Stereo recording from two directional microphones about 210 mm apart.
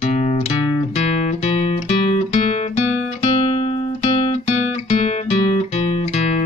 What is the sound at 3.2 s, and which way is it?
Guitar, 30° left (ahead or behind).